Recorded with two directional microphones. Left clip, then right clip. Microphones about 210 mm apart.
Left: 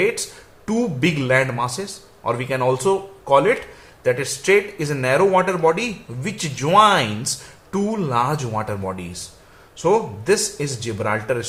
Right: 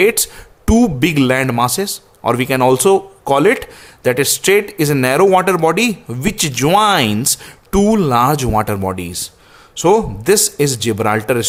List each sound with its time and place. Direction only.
0.6 s speech: 55° right (ahead or behind)